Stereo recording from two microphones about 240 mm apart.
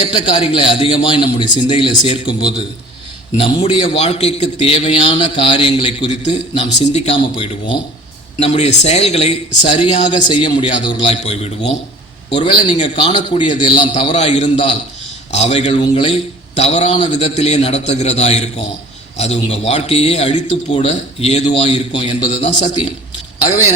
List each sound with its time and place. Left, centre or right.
0.0 s a man's voice: left